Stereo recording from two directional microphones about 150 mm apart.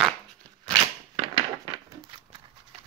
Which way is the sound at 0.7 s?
35° right (ahead or behind).